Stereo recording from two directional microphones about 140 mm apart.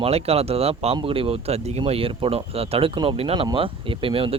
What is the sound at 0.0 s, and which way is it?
Speech, 45° right (ahead or behind).